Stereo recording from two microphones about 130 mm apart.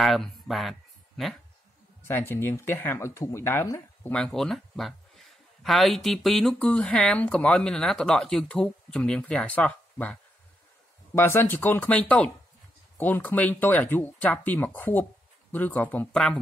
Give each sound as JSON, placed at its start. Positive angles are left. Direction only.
{"t": 0.0, "sound": "speech", "side_deg": 0}
{"t": 2.0, "sound": "speech", "side_deg": 15}
{"t": 4.1, "sound": "speech", "side_deg": 5}
{"t": 11.1, "sound": "speech", "side_deg": 15}